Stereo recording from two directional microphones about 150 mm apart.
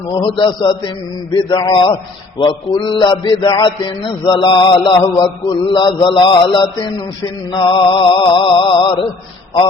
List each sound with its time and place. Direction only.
0.2 s mantra: 35° left (ahead or behind)